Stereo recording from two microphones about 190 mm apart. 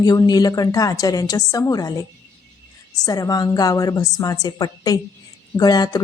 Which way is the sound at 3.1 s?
20° left (ahead or behind).